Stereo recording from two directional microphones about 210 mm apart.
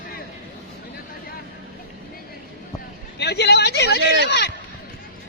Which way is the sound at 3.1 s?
50° left (ahead or behind).